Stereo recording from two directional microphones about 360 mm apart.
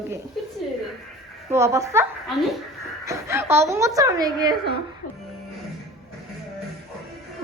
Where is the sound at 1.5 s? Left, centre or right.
Centre.